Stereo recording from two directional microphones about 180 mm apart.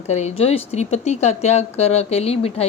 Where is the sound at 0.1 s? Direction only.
40° left (ahead or behind).